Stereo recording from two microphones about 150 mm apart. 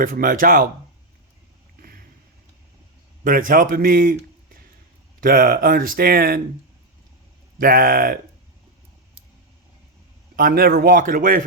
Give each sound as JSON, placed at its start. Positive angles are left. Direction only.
{"t": 0.0, "sound": "speech", "side_deg": -65}
{"t": 3.2, "sound": "speech", "side_deg": -65}
{"t": 5.2, "sound": "speech", "side_deg": -80}
{"t": 7.6, "sound": "speech", "side_deg": -70}
{"t": 10.3, "sound": "speech", "side_deg": -85}